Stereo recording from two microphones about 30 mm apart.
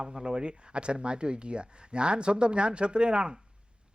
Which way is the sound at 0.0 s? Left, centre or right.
Right.